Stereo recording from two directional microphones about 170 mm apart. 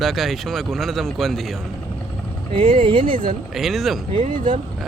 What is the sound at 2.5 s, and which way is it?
Speech, 30° right (ahead or behind).